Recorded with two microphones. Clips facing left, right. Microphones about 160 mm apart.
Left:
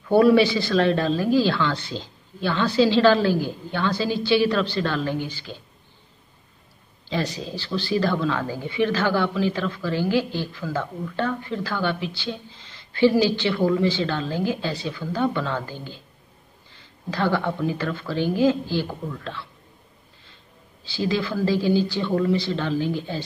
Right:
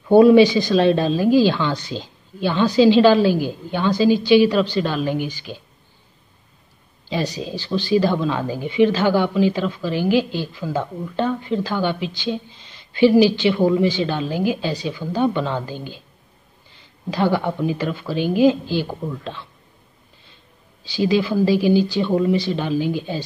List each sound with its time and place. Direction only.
0.1 s speech: 15° right (ahead or behind)
7.1 s speech: 15° right (ahead or behind)
20.8 s speech: 15° right (ahead or behind)